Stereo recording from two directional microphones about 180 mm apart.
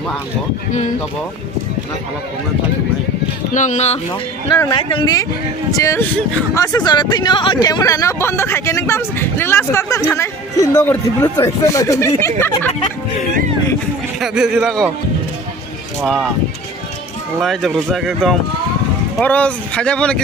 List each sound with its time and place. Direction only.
3.5 s speech: 40° left (ahead or behind)
4.7 s speech: 25° left (ahead or behind)
14.2 s speech: 5° right (ahead or behind)
17.4 s speech: centre (ahead or behind)